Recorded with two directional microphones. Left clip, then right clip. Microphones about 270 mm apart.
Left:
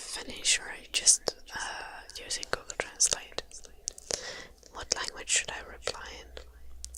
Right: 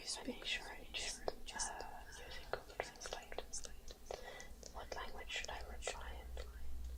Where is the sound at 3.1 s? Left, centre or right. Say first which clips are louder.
Left 12 dB; left.